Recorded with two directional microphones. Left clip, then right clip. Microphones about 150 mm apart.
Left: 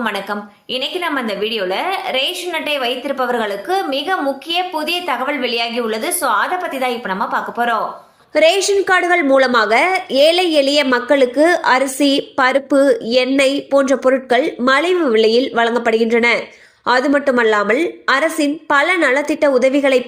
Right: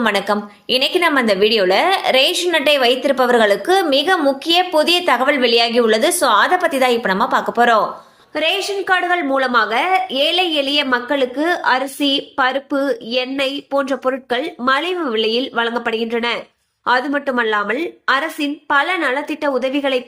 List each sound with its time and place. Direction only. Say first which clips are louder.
0.0 s a woman's voice: right 4 dB; 35° right (ahead or behind)
8.4 s a woman's voice: left 6 dB; 30° left (ahead or behind)